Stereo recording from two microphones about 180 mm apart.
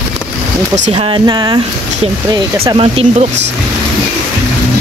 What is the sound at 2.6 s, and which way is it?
Speech, 30° right (ahead or behind).